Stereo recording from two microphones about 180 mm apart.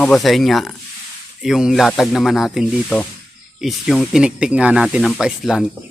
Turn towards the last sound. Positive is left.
turn(degrees=-5)  # may be behind; listen again after turning